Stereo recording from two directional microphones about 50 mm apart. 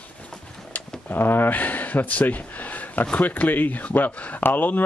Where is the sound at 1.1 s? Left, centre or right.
Left.